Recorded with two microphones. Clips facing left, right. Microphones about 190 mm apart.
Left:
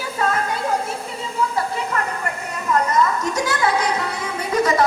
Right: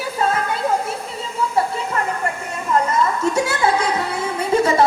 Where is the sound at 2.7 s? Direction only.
30° right (ahead or behind).